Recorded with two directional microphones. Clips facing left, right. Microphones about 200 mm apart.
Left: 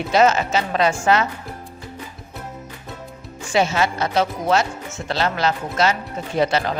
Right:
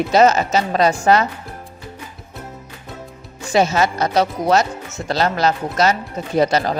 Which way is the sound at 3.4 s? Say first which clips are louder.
Right 3 dB; 40° right (ahead or behind).